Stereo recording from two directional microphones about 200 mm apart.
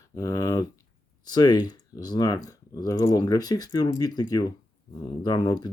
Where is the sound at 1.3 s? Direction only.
20° left (ahead or behind).